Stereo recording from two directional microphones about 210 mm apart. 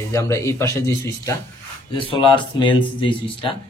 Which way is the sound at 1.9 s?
25° left (ahead or behind).